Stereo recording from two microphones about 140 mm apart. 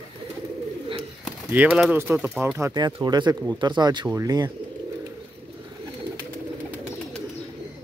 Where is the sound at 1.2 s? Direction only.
10° right (ahead or behind).